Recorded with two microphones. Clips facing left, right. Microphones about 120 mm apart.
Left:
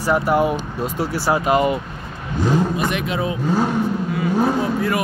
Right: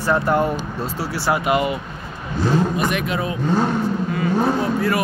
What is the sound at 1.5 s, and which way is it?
Speech, 40° left (ahead or behind).